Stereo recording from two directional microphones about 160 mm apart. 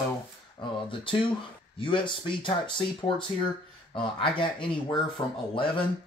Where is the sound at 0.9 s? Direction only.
30° left (ahead or behind).